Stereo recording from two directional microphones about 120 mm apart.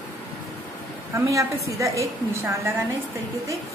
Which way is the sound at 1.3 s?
25° right (ahead or behind).